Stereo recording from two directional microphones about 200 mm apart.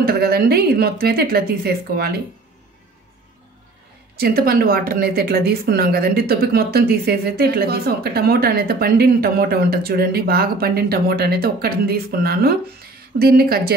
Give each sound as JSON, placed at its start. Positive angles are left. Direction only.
{"t": 0.0, "sound": "speech", "side_deg": -50}
{"t": 4.2, "sound": "speech", "side_deg": -50}